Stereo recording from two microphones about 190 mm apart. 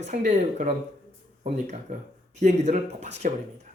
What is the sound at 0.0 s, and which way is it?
A man's voice, 40° right (ahead or behind).